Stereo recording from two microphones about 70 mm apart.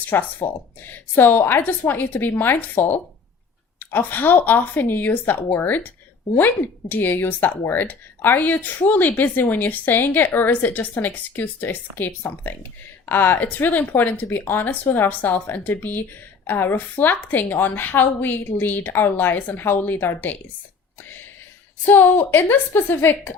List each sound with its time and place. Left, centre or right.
0.0 s speech: left
21.0 s a sound: left
21.8 s a woman's voice: left